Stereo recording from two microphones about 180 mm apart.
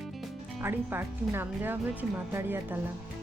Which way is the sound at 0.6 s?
10° right (ahead or behind).